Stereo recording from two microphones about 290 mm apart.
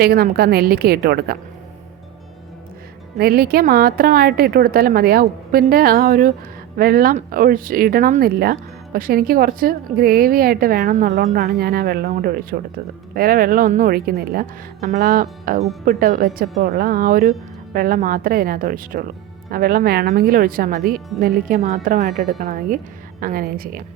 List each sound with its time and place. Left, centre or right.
0.0 s speech: right
3.2 s a woman's voice: right